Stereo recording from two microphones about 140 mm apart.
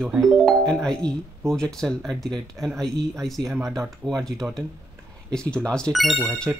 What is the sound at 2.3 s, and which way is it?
Speech, 30° right (ahead or behind).